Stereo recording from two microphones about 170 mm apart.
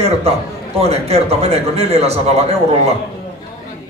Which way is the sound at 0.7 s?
35° right (ahead or behind).